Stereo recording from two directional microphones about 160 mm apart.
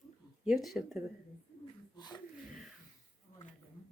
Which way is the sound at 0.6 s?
Centre (ahead or behind).